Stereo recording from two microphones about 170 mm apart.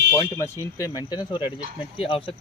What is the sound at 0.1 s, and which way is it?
Speech, 15° left (ahead or behind).